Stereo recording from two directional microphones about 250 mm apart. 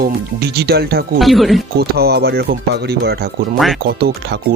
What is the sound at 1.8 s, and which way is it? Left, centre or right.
Speech, right.